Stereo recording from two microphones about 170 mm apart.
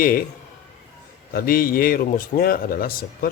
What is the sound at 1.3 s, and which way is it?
A man's voice, 60° left (ahead or behind).